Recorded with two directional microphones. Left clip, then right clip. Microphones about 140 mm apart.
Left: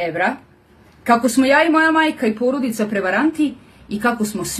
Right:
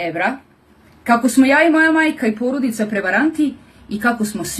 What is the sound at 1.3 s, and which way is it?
Speech, 25° left (ahead or behind).